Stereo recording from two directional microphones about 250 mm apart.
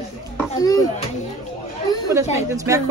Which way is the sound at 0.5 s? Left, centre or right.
Centre.